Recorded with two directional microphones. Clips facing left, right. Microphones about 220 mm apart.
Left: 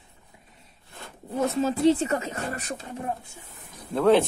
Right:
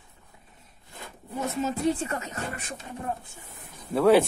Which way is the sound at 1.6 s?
30° left (ahead or behind).